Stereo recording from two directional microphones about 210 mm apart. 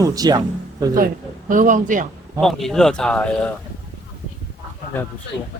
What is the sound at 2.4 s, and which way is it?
Speech, centre (ahead or behind).